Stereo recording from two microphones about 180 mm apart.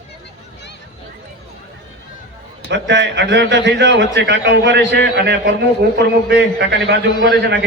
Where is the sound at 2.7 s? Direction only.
75° right (ahead or behind).